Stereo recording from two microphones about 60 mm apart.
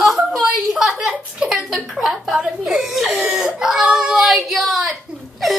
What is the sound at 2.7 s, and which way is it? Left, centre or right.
Baby cry, centre.